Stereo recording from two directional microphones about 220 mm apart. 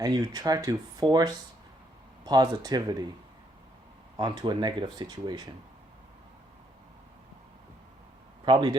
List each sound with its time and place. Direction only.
0.0 s speech: 15° right (ahead or behind)
4.2 s speech: 20° right (ahead or behind)
8.4 s speech: 20° right (ahead or behind)